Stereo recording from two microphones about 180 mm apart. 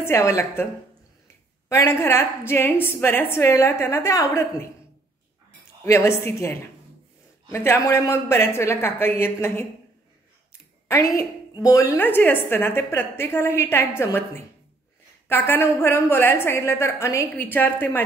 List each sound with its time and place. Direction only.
0.0 s a woman's voice: 15° left (ahead or behind)
1.7 s a woman's voice: 15° left (ahead or behind)
5.9 s a woman's voice: 15° left (ahead or behind)
10.9 s a woman's voice: 20° left (ahead or behind)